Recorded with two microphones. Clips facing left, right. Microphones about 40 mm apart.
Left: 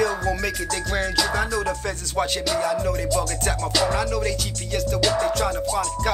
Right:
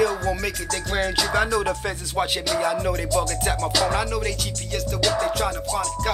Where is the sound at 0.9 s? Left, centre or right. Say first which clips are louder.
Right 2 dB; centre.